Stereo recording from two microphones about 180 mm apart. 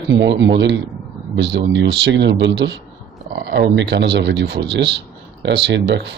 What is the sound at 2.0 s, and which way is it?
Speech, 80° right.